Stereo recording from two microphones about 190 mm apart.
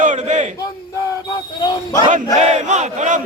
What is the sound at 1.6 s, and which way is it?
Speech, 20° left (ahead or behind).